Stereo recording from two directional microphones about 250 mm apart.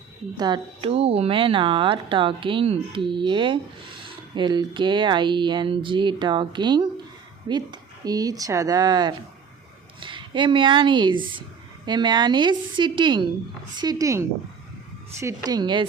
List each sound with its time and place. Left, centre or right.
0.3 s speech: centre